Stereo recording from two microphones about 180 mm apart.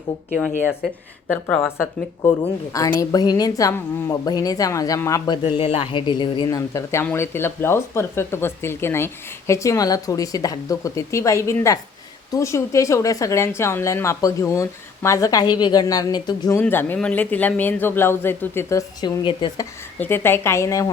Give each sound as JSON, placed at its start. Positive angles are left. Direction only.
{"t": 1.5, "sound": "a woman's voice", "side_deg": 10}
{"t": 16.6, "sound": "a woman's voice", "side_deg": 10}
{"t": 20.0, "sound": "a woman's voice", "side_deg": 10}